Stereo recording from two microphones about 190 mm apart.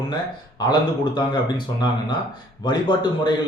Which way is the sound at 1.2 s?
25° left (ahead or behind).